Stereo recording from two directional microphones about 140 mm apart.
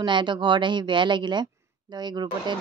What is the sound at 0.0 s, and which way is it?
Speech, 35° right (ahead or behind).